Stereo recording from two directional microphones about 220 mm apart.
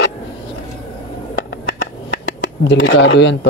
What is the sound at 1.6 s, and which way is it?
Finger snapping, 50° left (ahead or behind).